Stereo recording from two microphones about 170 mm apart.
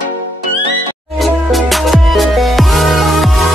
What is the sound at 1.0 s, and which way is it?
Music, centre (ahead or behind).